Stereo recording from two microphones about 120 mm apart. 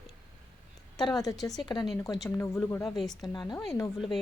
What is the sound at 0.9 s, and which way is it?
Speech, 30° left (ahead or behind).